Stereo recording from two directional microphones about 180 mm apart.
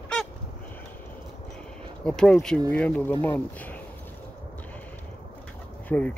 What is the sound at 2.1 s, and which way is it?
Speech, 5° left (ahead or behind).